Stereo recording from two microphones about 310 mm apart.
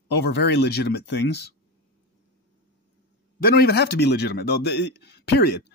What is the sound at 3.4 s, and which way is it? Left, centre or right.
A man's voice, left.